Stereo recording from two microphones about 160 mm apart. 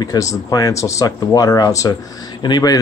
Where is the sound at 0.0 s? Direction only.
20° left (ahead or behind).